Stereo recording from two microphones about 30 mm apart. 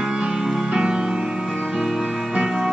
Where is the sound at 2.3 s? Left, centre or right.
Right.